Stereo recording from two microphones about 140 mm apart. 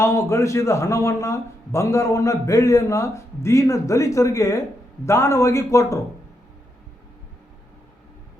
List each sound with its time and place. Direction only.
0.0 s speech: 20° left (ahead or behind)